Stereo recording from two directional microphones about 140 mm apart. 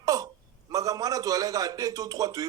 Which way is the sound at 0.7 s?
25° right (ahead or behind).